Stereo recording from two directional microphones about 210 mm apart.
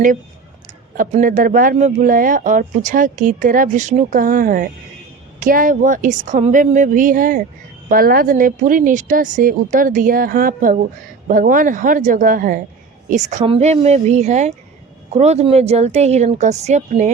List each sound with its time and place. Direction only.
0.9 s speech: 40° right (ahead or behind)